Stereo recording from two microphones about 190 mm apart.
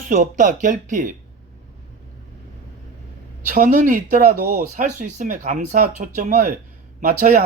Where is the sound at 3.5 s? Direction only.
45° right (ahead or behind).